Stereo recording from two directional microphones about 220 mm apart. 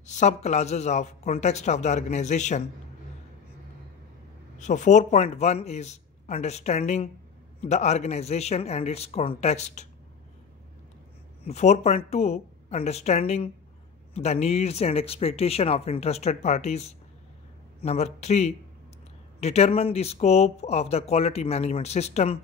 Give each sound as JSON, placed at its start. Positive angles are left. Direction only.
{"t": 0.0, "sound": "a man's voice", "side_deg": 30}
{"t": 4.6, "sound": "a man's voice", "side_deg": 35}
{"t": 11.4, "sound": "speech", "side_deg": 30}